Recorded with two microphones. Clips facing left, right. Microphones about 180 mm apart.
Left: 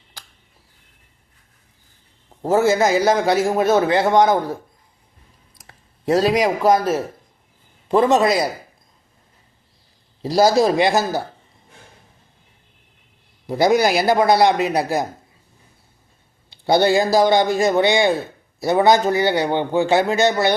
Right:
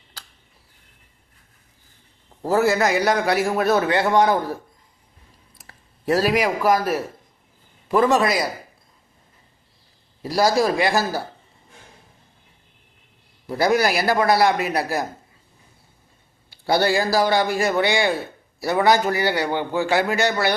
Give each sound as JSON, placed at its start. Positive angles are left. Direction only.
{"t": 2.4, "sound": "a man's voice", "side_deg": 20}
{"t": 5.6, "sound": "a man's voice", "side_deg": 20}
{"t": 10.2, "sound": "a man's voice", "side_deg": 25}
{"t": 13.5, "sound": "a man's voice", "side_deg": 20}
{"t": 16.6, "sound": "a man's voice", "side_deg": 20}